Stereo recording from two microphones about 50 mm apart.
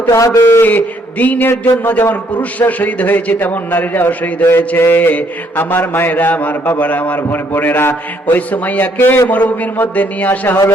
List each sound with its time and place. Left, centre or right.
0.1 s a man's voice: left
0.6 s a man's voice: left
1.5 s mantra: left
1.9 s a man's voice: left
2.3 s a man's voice: left
4.8 s mantra: left
6.1 s a man's voice: left
7.3 s mantra: left
8.4 s a man's voice: left
9.0 s mantra: left
9.3 s a man's voice: left